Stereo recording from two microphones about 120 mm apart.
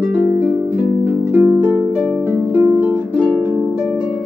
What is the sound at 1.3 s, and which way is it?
Harp, 15° right (ahead or behind).